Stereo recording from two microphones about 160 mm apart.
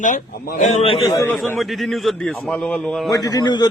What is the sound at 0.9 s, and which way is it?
Speech, 25° left (ahead or behind).